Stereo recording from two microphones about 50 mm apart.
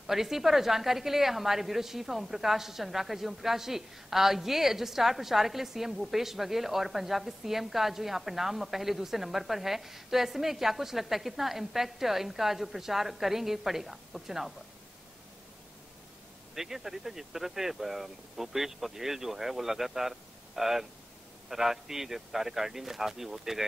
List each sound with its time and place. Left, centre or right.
0.0 s a woman's voice: centre
16.5 s speech: centre